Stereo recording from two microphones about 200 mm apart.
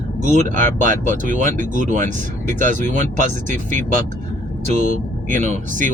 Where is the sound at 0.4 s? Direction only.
40° right (ahead or behind).